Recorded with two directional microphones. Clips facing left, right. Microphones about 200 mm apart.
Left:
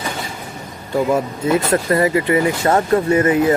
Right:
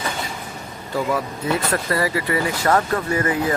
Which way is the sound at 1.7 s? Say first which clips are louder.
Left 6 dB; 20° left (ahead or behind).